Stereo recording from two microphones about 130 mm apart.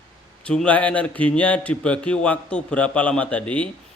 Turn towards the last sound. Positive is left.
turn(degrees=10)  # may be behind; listen again after turning